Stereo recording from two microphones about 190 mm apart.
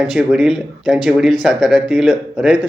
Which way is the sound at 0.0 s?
5° right (ahead or behind).